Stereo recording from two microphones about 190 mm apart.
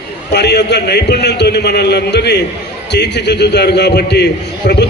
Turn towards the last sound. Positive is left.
turn(degrees=60)  # may be behind; listen again after turning